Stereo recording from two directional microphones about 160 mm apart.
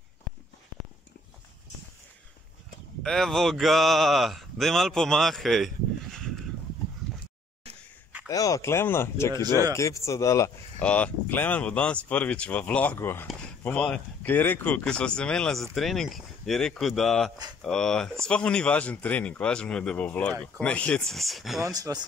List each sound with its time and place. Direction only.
3.0 s speech: 5° left (ahead or behind)
8.3 s speech: 20° left (ahead or behind)
9.3 s speech: 20° right (ahead or behind)
9.8 s speech: 20° left (ahead or behind)
10.8 s speech: 10° left (ahead or behind)
21.6 s speech: 20° right (ahead or behind)